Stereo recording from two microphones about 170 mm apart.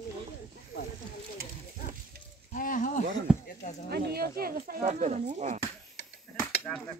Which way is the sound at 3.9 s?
65° right (ahead or behind).